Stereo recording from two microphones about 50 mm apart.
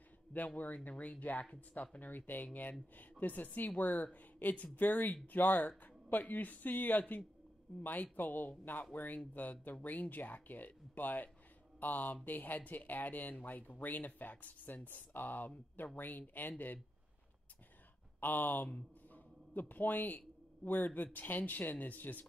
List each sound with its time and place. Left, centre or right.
0.8 s speech: left
18.2 s speech: left